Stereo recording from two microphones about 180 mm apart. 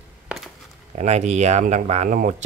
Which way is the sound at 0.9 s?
35° right (ahead or behind).